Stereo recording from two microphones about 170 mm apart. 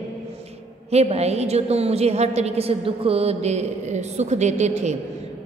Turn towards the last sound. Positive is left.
turn(degrees=-40)  # may be behind; listen again after turning